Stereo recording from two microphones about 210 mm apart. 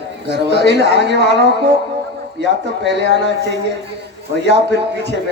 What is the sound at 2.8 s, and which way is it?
Speech, 55° right (ahead or behind).